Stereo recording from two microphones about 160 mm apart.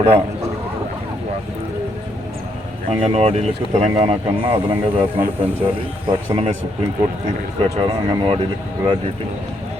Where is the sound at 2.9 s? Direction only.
35° right (ahead or behind).